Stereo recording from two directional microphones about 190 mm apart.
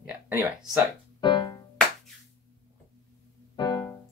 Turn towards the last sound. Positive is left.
turn(degrees=20)  # may be behind; listen again after turning